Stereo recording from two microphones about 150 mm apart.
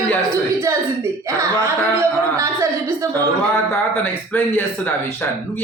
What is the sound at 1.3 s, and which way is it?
Speech, 20° right (ahead or behind).